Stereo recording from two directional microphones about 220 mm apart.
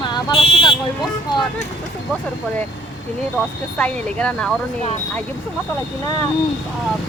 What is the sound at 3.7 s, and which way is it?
Speech, 5° left (ahead or behind).